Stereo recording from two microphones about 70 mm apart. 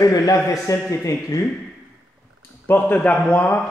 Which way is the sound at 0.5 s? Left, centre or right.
Left.